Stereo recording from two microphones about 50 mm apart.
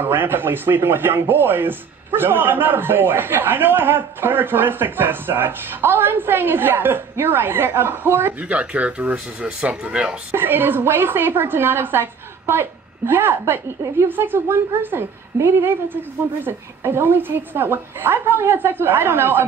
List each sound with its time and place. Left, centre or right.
0.0 s speech: right
8.4 s speech: right
10.3 s speech: right